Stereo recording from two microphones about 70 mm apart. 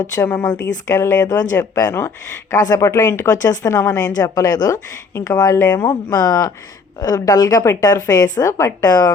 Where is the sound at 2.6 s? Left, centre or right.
Left.